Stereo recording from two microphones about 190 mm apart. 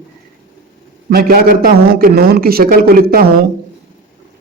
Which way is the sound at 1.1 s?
50° right (ahead or behind).